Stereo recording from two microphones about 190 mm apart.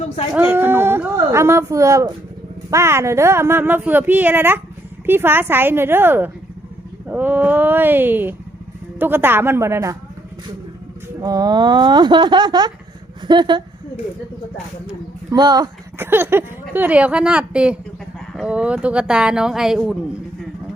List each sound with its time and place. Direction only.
0.3 s speech: 10° right (ahead or behind)
11.2 s speech: 20° right (ahead or behind)
15.3 s speech: 20° right (ahead or behind); by 20.0 s centre (ahead or behind)